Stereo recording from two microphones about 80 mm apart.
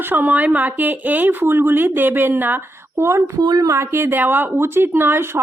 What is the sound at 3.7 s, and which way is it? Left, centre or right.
Speech, right.